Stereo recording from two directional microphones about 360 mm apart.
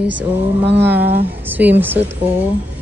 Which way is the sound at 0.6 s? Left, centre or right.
Right.